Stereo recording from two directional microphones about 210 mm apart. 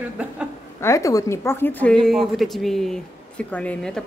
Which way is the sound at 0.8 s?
15° left (ahead or behind).